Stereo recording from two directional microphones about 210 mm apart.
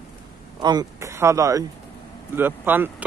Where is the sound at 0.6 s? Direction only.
20° right (ahead or behind).